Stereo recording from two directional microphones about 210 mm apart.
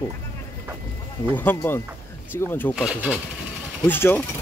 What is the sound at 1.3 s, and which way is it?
Speech, 10° left (ahead or behind).